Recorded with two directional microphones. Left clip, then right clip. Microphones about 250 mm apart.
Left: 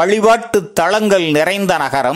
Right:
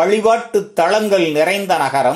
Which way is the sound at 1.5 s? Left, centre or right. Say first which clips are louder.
Even; left.